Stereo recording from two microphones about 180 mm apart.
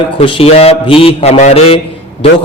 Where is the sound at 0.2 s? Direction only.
35° left (ahead or behind).